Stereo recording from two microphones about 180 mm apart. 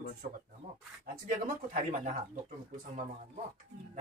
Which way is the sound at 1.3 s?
45° right (ahead or behind).